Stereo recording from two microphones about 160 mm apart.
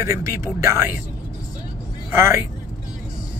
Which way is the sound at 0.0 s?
20° right (ahead or behind).